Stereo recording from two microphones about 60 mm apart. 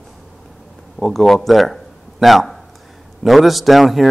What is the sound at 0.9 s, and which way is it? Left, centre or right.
A man's voice, centre.